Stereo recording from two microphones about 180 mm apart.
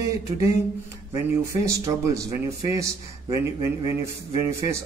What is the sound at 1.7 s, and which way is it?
Speech, 20° right (ahead or behind).